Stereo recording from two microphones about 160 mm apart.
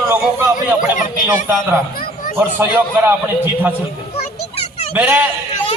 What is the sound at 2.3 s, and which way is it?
Speech, 15° right (ahead or behind).